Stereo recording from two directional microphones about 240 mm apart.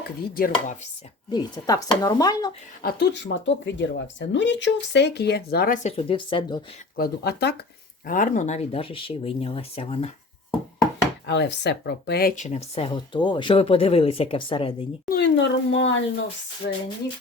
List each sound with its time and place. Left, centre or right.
0.3 s speech: left
1.3 s speech: centre
2.8 s speech: left
6.9 s speech: left
11.3 s speech: left
15.1 s speech: left
16.6 s speech: left